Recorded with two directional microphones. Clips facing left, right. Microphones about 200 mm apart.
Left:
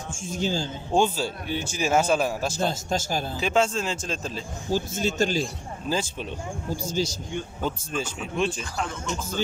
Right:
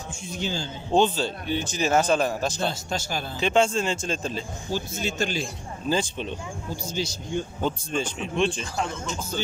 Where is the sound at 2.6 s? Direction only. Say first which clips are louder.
Left 2 dB; 45° left (ahead or behind).